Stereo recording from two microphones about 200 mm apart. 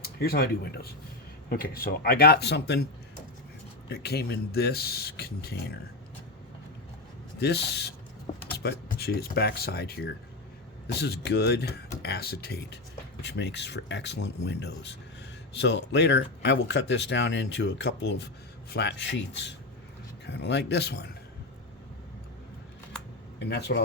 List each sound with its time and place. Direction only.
0.0 s speech: 50° left (ahead or behind)
3.8 s speech: 55° left (ahead or behind)
7.3 s speech: 55° left (ahead or behind)
23.4 s speech: 60° left (ahead or behind)